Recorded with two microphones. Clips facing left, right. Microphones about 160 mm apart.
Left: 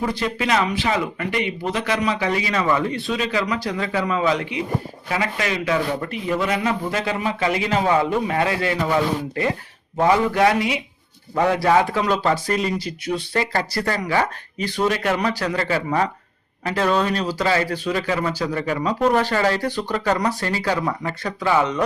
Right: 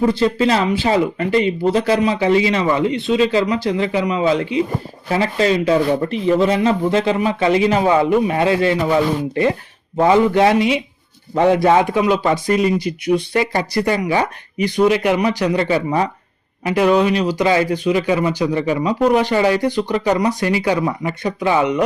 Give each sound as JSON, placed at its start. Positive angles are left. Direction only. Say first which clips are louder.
{"t": 0.0, "sound": "a man's voice", "louder": "right 8 dB", "side_deg": -30}